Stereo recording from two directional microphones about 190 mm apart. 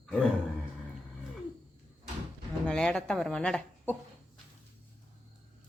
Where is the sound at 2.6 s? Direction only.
5° left (ahead or behind).